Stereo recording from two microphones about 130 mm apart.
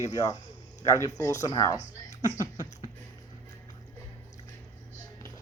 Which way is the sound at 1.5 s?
30° left (ahead or behind).